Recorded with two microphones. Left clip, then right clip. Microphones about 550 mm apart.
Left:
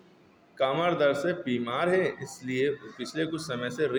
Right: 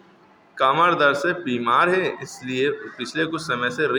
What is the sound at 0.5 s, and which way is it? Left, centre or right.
Speech, left.